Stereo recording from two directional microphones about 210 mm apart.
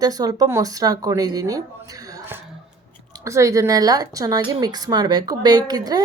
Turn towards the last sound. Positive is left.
turn(degrees=-20)  # may be behind; listen again after turning